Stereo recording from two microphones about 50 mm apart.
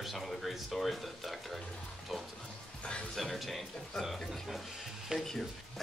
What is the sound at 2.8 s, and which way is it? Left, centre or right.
Speech, left.